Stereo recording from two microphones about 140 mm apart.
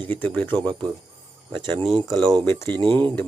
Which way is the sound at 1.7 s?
35° right (ahead or behind).